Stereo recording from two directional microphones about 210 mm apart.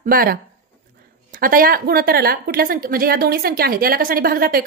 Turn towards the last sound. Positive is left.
turn(degrees=-45)  # may be behind; listen again after turning